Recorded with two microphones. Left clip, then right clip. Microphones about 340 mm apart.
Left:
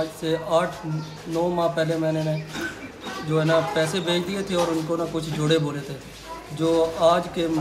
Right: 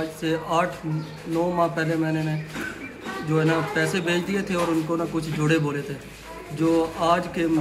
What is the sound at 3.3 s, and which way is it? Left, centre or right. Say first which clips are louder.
A man's voice: left 2 dB; centre.